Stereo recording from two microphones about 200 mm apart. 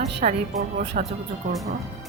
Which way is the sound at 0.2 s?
30° right (ahead or behind).